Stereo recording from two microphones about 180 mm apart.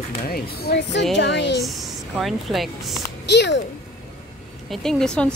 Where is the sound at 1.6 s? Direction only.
Centre (ahead or behind).